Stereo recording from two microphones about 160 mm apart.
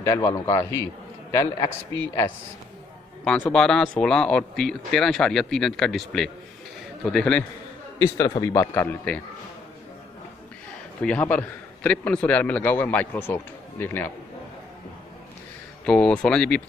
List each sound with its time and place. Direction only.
0.0 s a man's voice: 20° left (ahead or behind)
3.3 s speech: 5° left (ahead or behind)
8.2 s a man's voice: 20° left (ahead or behind)
11.0 s a man's voice: 5° left (ahead or behind)
15.8 s speech: 5° left (ahead or behind)